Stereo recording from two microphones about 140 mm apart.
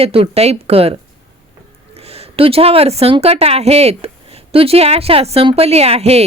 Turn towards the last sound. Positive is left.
turn(degrees=-45)  # may be behind; listen again after turning